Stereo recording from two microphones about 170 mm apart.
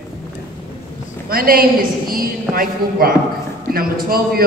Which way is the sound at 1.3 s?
60° right (ahead or behind).